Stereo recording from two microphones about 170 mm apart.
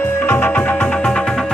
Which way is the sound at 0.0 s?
10° left (ahead or behind).